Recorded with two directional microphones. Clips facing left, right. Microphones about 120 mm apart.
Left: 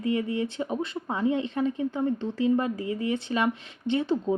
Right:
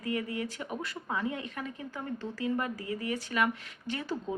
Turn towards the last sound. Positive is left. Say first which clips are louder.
# left 10 dB
turn(degrees=25)  # may be behind; listen again after turning